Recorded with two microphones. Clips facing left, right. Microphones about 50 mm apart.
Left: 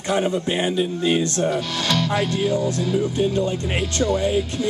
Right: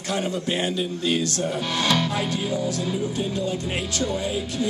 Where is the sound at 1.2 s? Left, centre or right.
Left.